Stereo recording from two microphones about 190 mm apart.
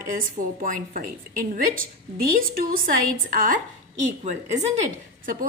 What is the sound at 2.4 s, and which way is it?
A woman's voice, 50° right (ahead or behind).